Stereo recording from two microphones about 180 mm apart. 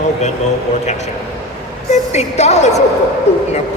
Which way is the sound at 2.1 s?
40° left (ahead or behind).